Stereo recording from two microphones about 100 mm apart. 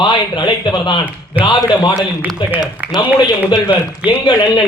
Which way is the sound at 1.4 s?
15° right (ahead or behind).